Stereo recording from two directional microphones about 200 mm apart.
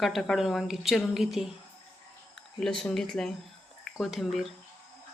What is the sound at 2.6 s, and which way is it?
Speech, 5° left (ahead or behind).